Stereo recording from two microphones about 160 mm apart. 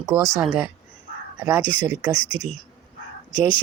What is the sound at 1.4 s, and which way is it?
Speech, 15° right (ahead or behind).